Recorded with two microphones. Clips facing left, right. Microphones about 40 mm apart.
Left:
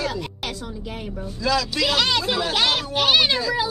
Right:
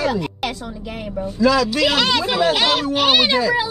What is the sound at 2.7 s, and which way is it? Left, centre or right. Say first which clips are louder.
Speech: right 3 dB; centre.